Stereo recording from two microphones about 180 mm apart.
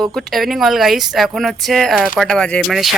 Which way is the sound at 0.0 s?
Centre (ahead or behind).